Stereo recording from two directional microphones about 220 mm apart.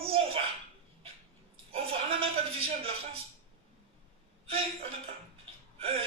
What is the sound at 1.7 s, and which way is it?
A man's voice, 25° right (ahead or behind).